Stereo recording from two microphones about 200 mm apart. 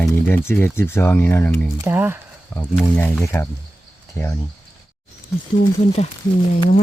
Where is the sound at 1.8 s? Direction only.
10° right (ahead or behind).